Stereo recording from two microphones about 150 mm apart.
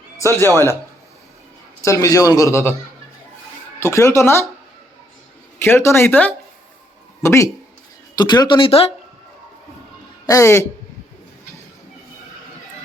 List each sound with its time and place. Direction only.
0.2 s speech: 20° left (ahead or behind)
1.8 s a man's voice: 20° left (ahead or behind)
3.8 s speech: 15° left (ahead or behind)
5.5 s a man's voice: 15° left (ahead or behind); by 8.9 s 40° left (ahead or behind)
10.2 s a man's voice: 20° left (ahead or behind)